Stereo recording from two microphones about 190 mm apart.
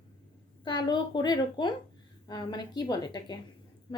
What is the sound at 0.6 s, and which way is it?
Speech, 25° left (ahead or behind).